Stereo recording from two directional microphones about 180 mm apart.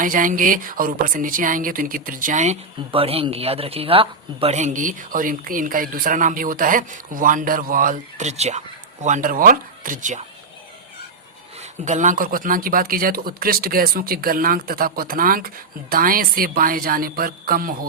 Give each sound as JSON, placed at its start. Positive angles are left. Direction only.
{"t": 0.0, "sound": "a man's voice", "side_deg": -50}
{"t": 2.9, "sound": "a man's voice", "side_deg": -30}
{"t": 11.6, "sound": "a man's voice", "side_deg": -40}